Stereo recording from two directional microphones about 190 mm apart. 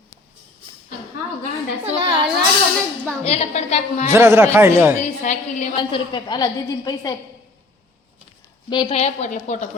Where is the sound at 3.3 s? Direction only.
35° left (ahead or behind).